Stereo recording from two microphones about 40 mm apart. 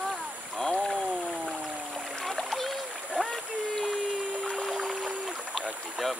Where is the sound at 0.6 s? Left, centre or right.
Centre.